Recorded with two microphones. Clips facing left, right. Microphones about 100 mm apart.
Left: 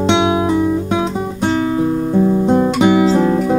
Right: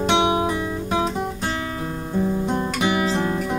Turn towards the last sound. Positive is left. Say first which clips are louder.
# left 9 dB
turn(degrees=15)  # may be behind; listen again after turning